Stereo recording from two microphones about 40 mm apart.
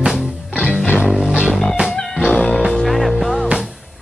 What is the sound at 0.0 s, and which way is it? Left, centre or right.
Music, centre.